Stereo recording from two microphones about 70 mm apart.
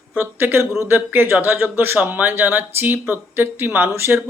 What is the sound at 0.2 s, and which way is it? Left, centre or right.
A man's voice, right.